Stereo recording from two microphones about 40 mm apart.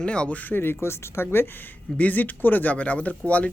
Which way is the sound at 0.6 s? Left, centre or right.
Left.